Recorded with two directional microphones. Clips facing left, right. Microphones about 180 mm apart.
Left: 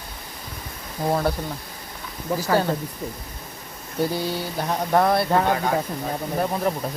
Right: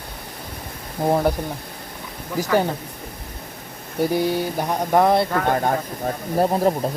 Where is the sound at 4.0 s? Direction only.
15° right (ahead or behind).